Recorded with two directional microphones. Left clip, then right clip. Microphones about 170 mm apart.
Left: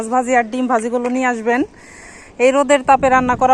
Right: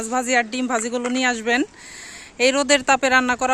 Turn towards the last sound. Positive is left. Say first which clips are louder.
# left 5 dB
turn(degrees=-20)  # may be behind; listen again after turning